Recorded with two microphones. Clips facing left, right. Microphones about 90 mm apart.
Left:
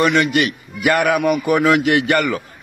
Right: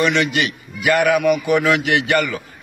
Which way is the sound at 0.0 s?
50° left (ahead or behind).